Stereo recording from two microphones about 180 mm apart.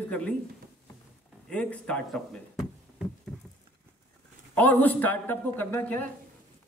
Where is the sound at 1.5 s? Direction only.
5° left (ahead or behind).